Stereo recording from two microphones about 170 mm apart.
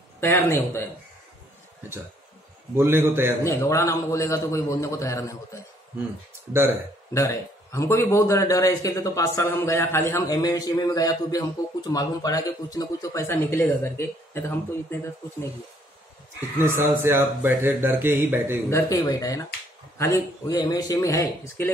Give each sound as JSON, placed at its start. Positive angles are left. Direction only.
{"t": 0.2, "sound": "a man's voice", "side_deg": 15}
{"t": 2.7, "sound": "speech", "side_deg": -15}
{"t": 3.4, "sound": "a man's voice", "side_deg": 15}
{"t": 7.2, "sound": "a man's voice", "side_deg": 15}
{"t": 16.3, "sound": "speech", "side_deg": -15}
{"t": 18.7, "sound": "a man's voice", "side_deg": 20}